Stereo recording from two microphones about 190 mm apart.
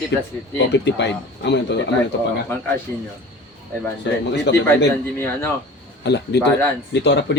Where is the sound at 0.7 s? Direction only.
65° left (ahead or behind).